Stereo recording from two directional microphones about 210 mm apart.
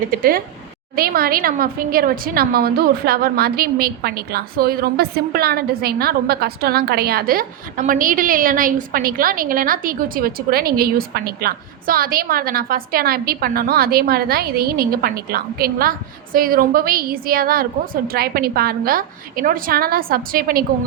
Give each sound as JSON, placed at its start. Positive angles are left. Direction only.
{"t": 0.1, "sound": "a woman's voice", "side_deg": -45}